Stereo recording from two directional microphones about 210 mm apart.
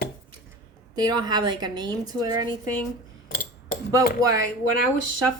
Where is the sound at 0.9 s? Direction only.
20° right (ahead or behind).